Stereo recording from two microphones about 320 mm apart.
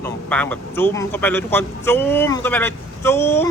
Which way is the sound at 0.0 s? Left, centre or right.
Centre.